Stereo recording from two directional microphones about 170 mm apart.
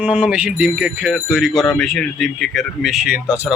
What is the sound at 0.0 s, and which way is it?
Speech, 5° right (ahead or behind).